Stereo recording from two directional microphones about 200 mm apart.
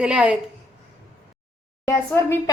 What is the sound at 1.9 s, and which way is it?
Speech, 15° left (ahead or behind).